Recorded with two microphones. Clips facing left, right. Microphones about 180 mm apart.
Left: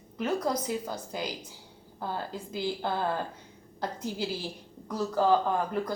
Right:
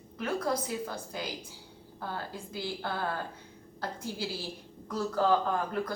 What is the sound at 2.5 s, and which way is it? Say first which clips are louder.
A woman's voice: left 5 dB; 20° left (ahead or behind).